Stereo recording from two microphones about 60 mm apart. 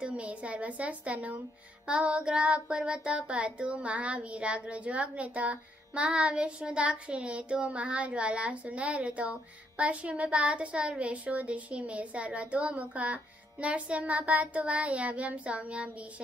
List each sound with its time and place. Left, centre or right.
0.0 s a woman's voice: right